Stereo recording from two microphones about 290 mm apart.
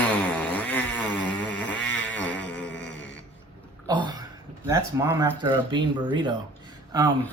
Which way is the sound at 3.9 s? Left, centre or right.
Centre.